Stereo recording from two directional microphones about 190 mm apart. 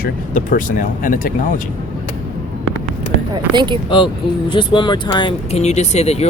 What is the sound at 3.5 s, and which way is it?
Speech, 25° right (ahead or behind).